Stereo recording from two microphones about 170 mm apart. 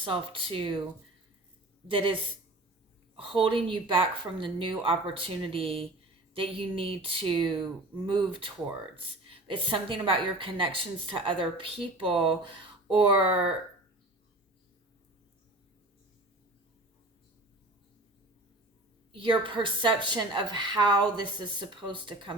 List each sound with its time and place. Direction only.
0.0 s a woman's voice: 30° right (ahead or behind)
1.9 s a woman's voice: 30° right (ahead or behind)
3.2 s a woman's voice: 30° right (ahead or behind)
19.1 s a woman's voice: 30° right (ahead or behind)